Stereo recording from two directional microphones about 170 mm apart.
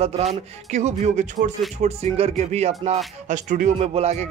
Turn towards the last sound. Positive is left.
turn(degrees=-40)  # may be behind; listen again after turning